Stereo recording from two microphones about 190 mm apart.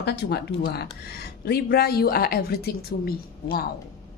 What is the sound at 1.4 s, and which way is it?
Speech, 55° left (ahead or behind).